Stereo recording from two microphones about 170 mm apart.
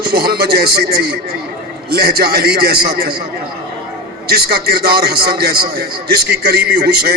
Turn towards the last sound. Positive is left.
turn(degrees=-65)  # may be behind; listen again after turning